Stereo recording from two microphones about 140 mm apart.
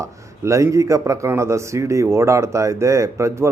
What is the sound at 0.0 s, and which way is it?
Speech, 20° right (ahead or behind).